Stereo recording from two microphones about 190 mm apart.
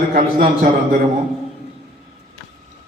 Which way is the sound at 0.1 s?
45° right (ahead or behind).